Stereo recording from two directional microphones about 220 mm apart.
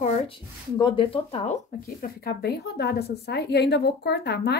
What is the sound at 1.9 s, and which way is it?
A woman's voice, 45° left (ahead or behind).